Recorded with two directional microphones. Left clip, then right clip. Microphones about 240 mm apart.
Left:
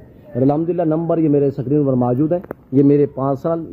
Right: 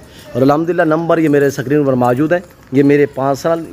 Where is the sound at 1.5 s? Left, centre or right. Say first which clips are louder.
Right 4 dB; centre.